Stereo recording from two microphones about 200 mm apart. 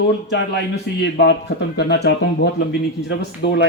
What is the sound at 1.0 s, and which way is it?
A man's voice, 60° left (ahead or behind).